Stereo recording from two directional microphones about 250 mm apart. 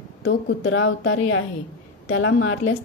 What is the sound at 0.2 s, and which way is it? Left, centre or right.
A woman's voice, left.